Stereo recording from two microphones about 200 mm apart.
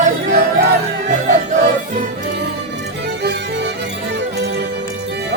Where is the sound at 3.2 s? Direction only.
55° right (ahead or behind).